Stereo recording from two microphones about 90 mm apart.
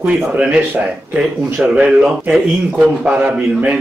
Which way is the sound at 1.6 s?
10° right (ahead or behind).